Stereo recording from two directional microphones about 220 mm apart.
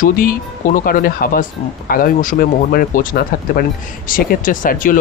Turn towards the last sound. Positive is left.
turn(degrees=40)  # may be behind; listen again after turning